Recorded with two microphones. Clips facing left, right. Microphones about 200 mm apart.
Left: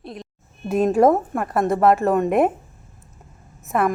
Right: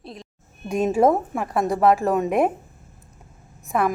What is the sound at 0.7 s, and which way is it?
A woman's voice, centre (ahead or behind).